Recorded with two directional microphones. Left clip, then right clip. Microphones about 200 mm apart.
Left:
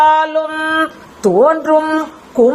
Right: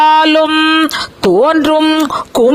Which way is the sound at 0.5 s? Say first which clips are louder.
Right 6 dB; 90° right.